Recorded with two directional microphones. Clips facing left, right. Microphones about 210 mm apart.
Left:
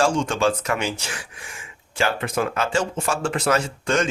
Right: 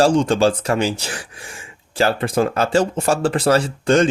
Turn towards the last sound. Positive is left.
turn(degrees=-35)  # may be behind; listen again after turning